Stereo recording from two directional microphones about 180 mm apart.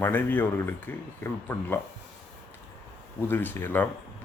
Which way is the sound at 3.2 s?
10° left (ahead or behind).